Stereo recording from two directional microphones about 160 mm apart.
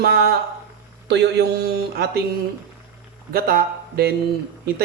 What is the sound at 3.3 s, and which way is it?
Speech, 75° right (ahead or behind).